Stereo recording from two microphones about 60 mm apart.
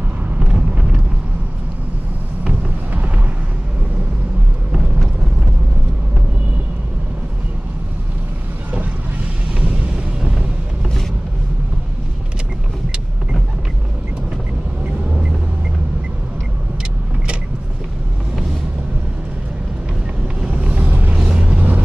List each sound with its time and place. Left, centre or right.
0.4 s vehicle: centre
2.4 s a sound: right
20.3 s vehicle: centre